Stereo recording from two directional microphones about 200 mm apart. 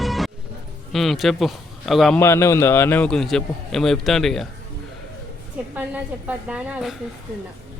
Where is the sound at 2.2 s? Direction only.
15° left (ahead or behind).